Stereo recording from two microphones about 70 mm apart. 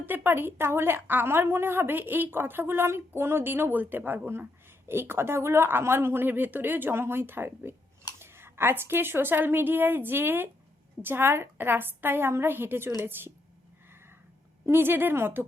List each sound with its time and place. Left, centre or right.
0.0 s a woman's voice: right
14.7 s a woman's voice: right